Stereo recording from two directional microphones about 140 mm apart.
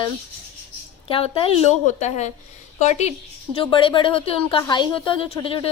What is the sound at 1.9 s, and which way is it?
Speech, 55° left (ahead or behind).